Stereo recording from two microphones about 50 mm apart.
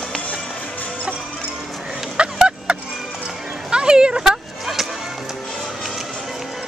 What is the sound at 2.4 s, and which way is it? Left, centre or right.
Music, centre.